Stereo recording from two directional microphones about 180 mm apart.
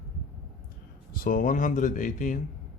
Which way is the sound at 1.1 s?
50° left (ahead or behind).